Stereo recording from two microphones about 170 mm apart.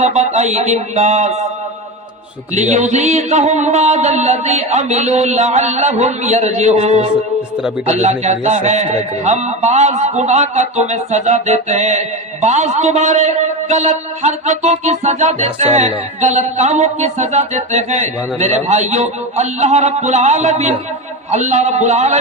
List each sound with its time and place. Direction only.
0.0 s speech: 40° right (ahead or behind)
2.6 s a man's voice: 45° right (ahead or behind)